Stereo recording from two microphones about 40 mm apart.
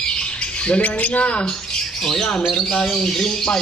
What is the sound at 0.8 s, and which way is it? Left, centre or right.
Speech, left.